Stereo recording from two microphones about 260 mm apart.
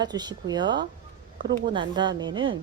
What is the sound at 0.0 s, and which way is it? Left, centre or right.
Speech, centre.